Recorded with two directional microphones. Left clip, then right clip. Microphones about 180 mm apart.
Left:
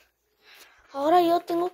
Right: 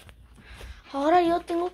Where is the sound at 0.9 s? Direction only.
25° left (ahead or behind).